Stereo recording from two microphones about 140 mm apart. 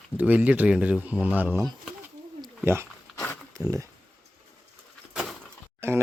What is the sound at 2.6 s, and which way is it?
Speech, 20° right (ahead or behind).